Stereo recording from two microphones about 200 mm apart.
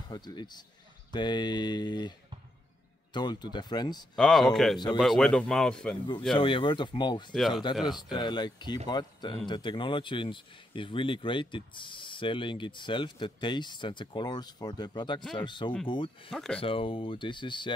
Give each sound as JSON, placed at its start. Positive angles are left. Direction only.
{"t": 0.1, "sound": "speech", "side_deg": 20}
{"t": 4.1, "sound": "speech", "side_deg": 0}
{"t": 6.3, "sound": "speech", "side_deg": 25}
{"t": 7.3, "sound": "speech", "side_deg": 0}
{"t": 7.8, "sound": "speech", "side_deg": 20}
{"t": 16.3, "sound": "speech", "side_deg": 0}
{"t": 16.5, "sound": "speech", "side_deg": 25}